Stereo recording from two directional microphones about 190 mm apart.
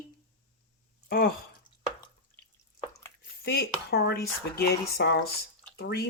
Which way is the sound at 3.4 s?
55° left (ahead or behind).